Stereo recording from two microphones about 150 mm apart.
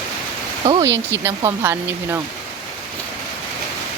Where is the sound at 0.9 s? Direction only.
15° right (ahead or behind).